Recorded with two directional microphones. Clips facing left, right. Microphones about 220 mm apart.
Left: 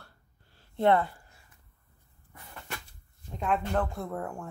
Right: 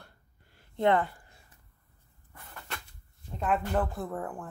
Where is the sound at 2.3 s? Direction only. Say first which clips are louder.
Left 1 dB; 10° left (ahead or behind).